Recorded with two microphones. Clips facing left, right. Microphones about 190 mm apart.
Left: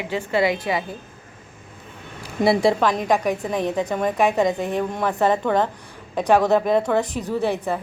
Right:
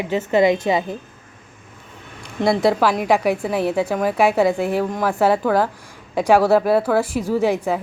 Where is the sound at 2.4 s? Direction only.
10° left (ahead or behind).